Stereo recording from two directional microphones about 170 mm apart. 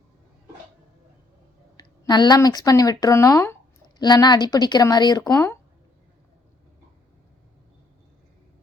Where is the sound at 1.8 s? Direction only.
25° left (ahead or behind).